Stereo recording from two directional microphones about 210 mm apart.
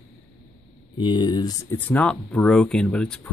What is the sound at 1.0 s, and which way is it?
Speech, 20° left (ahead or behind).